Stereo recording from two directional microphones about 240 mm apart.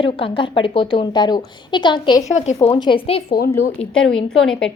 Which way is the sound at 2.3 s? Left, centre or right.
Left.